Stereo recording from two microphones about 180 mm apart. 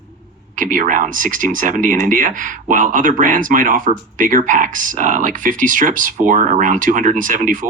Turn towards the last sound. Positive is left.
turn(degrees=-45)  # may be behind; listen again after turning